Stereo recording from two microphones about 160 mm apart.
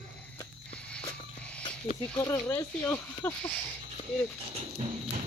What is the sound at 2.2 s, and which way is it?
Speech, 20° left (ahead or behind).